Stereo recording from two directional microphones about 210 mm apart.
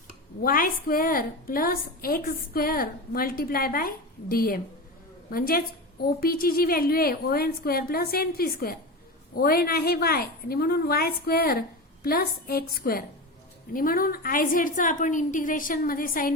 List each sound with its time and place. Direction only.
0.4 s a woman's voice: 45° left (ahead or behind)